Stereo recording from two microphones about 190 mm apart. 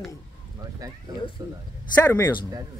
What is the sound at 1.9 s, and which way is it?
Speech, 10° left (ahead or behind).